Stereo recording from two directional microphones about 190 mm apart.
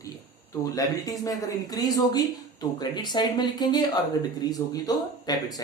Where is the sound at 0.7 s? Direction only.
20° left (ahead or behind).